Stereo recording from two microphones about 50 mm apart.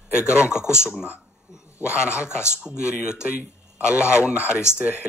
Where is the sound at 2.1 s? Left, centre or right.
Left.